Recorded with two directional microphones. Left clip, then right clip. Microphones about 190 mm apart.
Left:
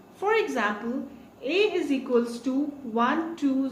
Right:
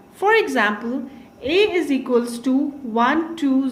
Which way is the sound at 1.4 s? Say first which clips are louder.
Right 6 dB; 50° right (ahead or behind).